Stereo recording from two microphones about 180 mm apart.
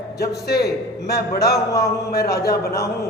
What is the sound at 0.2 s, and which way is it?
Speech, 60° left (ahead or behind).